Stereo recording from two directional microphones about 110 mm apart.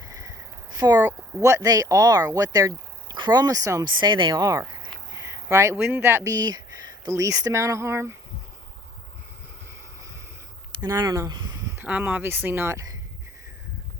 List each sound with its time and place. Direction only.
0.0 s a sound: 30° right (ahead or behind)
1.4 s speech: 30° right (ahead or behind)
4.0 s speech: 45° right (ahead or behind)
5.2 s a sound: 25° right (ahead or behind)
5.7 s speech: 20° right (ahead or behind)
6.3 s speech: 35° right (ahead or behind)
10.8 s speech: 30° right (ahead or behind)
11.8 s speech: 15° right (ahead or behind); by 13.0 s 30° right (ahead or behind)